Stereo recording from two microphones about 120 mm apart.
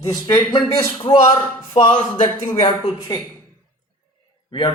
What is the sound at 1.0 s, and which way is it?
Speech, 40° left (ahead or behind).